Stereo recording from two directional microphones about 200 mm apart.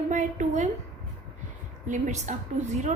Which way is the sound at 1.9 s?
40° right (ahead or behind).